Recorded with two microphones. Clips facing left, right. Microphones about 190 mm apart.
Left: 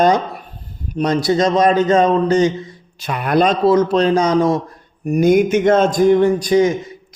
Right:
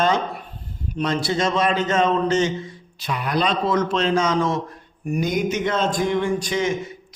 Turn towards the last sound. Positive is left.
turn(degrees=35)  # may be behind; listen again after turning